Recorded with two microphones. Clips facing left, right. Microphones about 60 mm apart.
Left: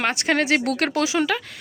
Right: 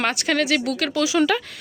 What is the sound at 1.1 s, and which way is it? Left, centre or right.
Speech, centre.